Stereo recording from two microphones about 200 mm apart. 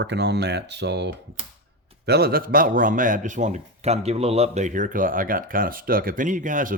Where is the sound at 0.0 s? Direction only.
60° right (ahead or behind).